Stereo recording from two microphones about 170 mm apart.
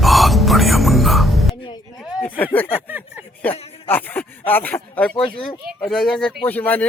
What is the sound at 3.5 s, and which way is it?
Speech, 35° left (ahead or behind).